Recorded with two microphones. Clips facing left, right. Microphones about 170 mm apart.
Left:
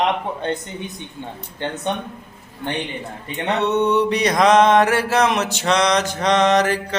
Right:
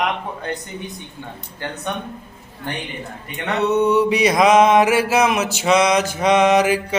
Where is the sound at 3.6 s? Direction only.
5° right (ahead or behind).